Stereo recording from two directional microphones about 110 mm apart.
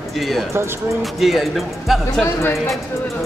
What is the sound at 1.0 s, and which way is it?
Speech, centre (ahead or behind).